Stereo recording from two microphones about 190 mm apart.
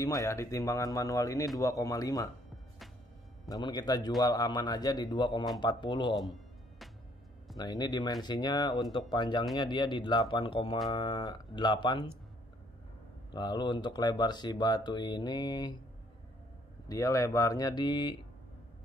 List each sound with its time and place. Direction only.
0.0 s speech: 15° left (ahead or behind)
3.4 s speech: 20° left (ahead or behind)
7.5 s speech: 20° left (ahead or behind)
13.3 s speech: 25° left (ahead or behind)
16.8 s speech: 15° left (ahead or behind)